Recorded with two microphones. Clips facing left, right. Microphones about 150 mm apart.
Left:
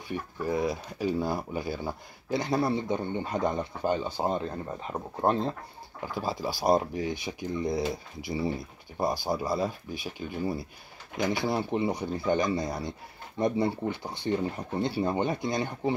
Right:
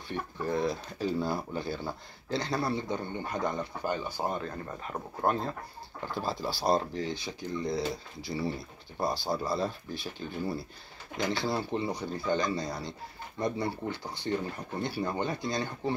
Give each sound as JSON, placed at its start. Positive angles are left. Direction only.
{"t": 0.1, "sound": "speech", "side_deg": 10}
{"t": 5.2, "sound": "speech", "side_deg": 30}
{"t": 6.0, "sound": "speech", "side_deg": 5}